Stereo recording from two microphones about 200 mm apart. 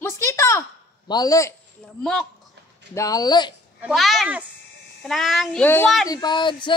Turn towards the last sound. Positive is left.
turn(degrees=25)  # may be behind; listen again after turning